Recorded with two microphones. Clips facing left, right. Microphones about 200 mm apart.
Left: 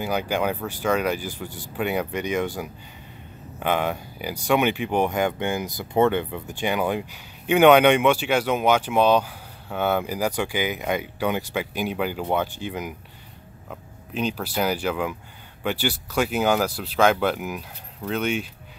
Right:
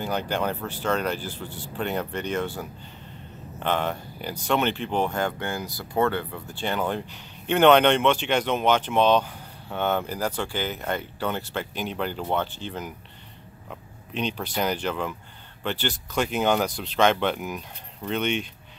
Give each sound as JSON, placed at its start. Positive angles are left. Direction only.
{"t": 0.0, "sound": "speech", "side_deg": 10}